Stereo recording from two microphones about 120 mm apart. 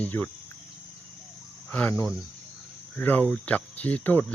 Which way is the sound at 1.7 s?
10° left (ahead or behind).